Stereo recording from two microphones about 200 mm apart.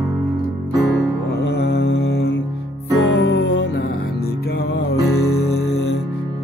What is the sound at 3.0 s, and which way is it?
Music, 60° left (ahead or behind).